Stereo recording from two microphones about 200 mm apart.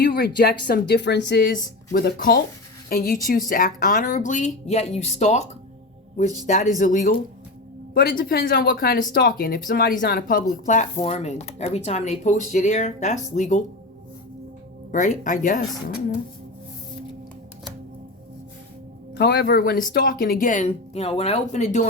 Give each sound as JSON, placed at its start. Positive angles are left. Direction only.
{"t": 0.0, "sound": "speech", "side_deg": 50}
{"t": 7.9, "sound": "speech", "side_deg": 50}
{"t": 14.9, "sound": "speech", "side_deg": 40}
{"t": 19.1, "sound": "speech", "side_deg": 55}